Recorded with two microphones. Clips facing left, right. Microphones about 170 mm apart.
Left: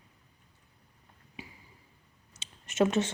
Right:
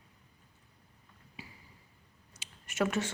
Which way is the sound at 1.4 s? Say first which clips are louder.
Left 3 dB; 20° left (ahead or behind).